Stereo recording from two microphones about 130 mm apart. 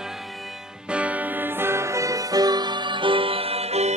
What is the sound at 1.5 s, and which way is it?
Music, 20° right (ahead or behind).